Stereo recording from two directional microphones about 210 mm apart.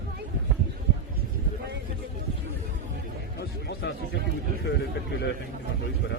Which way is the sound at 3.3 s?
50° left (ahead or behind).